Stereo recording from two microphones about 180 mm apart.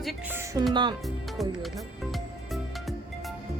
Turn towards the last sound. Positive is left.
turn(degrees=0)  # may be behind; listen again after turning